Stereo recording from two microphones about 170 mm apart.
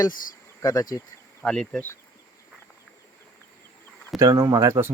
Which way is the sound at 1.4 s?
5° left (ahead or behind).